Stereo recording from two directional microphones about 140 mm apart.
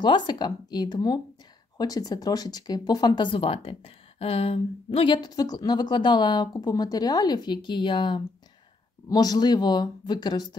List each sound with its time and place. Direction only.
0.0 s speech: 35° left (ahead or behind)